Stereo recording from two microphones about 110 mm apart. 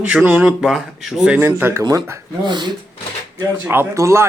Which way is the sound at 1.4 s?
20° right (ahead or behind).